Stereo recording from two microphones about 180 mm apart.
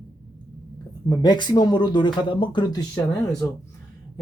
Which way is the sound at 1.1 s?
25° left (ahead or behind).